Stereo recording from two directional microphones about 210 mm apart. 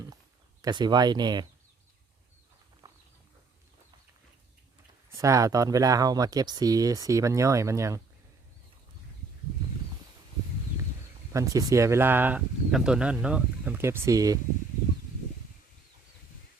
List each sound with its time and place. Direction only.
0.6 s speech: 20° right (ahead or behind)
2.8 s a sound: 15° right (ahead or behind)
5.1 s speech: 15° right (ahead or behind)
11.3 s speech: 15° right (ahead or behind)